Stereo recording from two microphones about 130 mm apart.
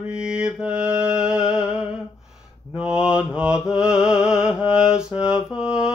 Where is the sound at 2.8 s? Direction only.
5° right (ahead or behind).